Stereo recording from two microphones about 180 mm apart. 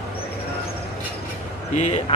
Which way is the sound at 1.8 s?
35° left (ahead or behind).